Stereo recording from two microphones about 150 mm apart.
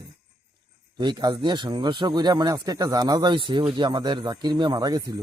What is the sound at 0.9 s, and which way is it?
A man's voice, 30° right (ahead or behind).